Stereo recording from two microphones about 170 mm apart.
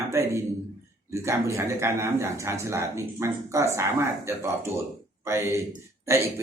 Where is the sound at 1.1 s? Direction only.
15° right (ahead or behind).